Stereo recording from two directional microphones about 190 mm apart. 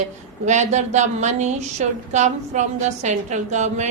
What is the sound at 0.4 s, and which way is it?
A woman's voice, 40° right (ahead or behind).